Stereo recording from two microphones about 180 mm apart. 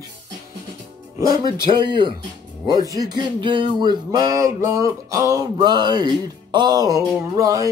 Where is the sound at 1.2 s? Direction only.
20° right (ahead or behind).